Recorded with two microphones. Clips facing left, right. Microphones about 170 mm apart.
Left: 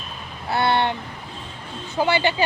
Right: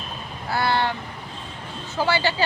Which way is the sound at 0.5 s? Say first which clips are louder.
Left 2 dB; 25° left (ahead or behind).